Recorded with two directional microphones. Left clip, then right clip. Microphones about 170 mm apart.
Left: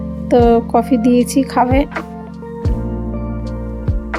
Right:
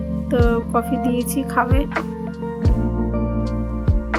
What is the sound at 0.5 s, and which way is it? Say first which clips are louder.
Speech: left 7 dB; 25° left (ahead or behind).